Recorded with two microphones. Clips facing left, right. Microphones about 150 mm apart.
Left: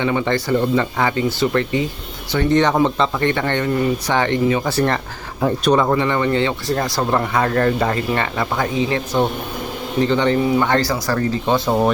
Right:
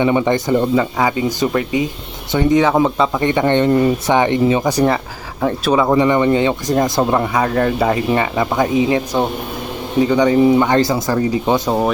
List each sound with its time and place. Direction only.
0.0 s speech: 15° right (ahead or behind)
5.4 s speech: centre (ahead or behind)